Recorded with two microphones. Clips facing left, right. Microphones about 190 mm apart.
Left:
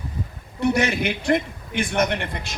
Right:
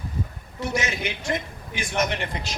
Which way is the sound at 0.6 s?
60° left (ahead or behind).